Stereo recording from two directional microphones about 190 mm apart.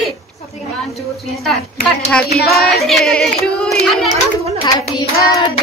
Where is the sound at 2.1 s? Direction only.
5° left (ahead or behind).